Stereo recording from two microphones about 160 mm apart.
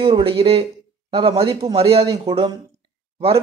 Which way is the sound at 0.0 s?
35° right (ahead or behind).